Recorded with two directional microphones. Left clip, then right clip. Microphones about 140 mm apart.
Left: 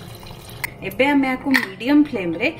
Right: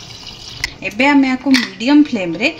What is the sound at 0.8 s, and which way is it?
Speech, 45° right (ahead or behind).